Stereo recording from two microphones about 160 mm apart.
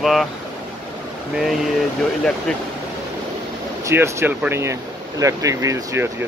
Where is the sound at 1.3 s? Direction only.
Centre (ahead or behind).